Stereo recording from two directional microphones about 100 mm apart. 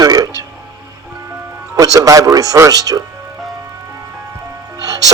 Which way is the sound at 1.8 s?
35° right (ahead or behind).